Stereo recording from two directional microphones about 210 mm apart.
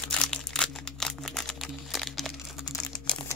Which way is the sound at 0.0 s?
5° left (ahead or behind).